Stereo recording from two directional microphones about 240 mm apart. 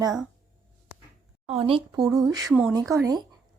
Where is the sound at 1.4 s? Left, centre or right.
Right.